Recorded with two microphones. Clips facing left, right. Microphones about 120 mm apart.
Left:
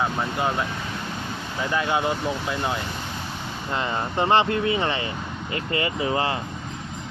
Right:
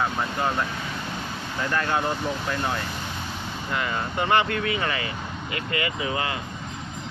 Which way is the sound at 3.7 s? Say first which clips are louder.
Left 2 dB; 25° left (ahead or behind).